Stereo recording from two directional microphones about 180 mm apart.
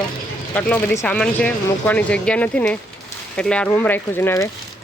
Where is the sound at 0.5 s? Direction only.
10° left (ahead or behind).